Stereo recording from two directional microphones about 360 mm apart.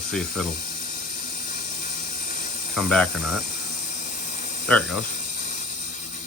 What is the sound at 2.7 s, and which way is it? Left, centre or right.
Speech, centre.